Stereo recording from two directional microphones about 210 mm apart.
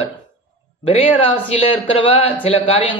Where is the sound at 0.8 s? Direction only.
25° left (ahead or behind).